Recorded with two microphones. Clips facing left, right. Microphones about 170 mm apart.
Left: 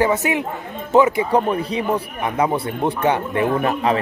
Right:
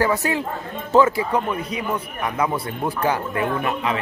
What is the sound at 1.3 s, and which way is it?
Speech, 30° left (ahead or behind).